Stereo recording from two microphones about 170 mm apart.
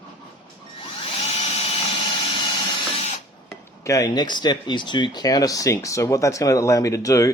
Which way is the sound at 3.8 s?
20° left (ahead or behind).